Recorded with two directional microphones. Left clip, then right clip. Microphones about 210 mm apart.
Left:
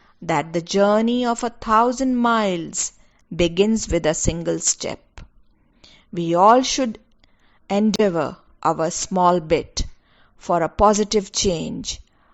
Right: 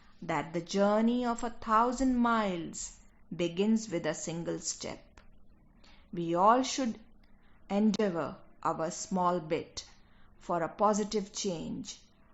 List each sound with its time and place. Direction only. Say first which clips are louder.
0.3 s speech: left 12 dB; 40° left (ahead or behind)